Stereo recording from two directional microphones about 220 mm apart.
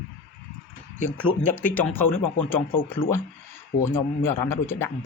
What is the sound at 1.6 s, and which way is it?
Speech, 10° left (ahead or behind).